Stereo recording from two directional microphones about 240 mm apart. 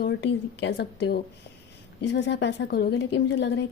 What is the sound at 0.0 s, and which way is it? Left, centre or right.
A woman's voice, left.